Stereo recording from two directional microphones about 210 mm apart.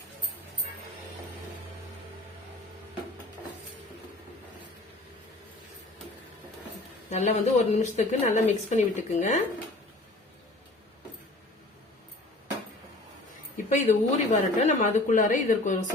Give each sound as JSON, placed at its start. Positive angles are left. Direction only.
{"t": 7.1, "sound": "speech", "side_deg": 35}
{"t": 13.6, "sound": "speech", "side_deg": 35}